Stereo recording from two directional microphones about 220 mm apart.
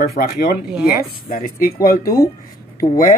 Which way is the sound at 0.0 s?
45° left (ahead or behind).